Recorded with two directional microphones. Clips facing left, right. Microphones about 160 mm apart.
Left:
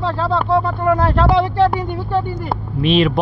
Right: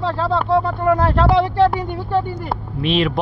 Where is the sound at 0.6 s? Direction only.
35° right (ahead or behind).